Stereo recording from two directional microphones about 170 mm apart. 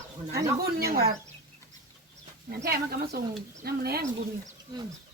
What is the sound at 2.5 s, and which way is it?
Speech, 65° right (ahead or behind).